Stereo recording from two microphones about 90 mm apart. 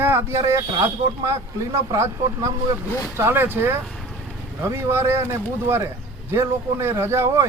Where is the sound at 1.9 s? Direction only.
35° right (ahead or behind).